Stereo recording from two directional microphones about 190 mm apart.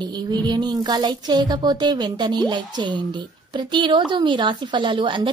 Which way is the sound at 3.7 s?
25° right (ahead or behind).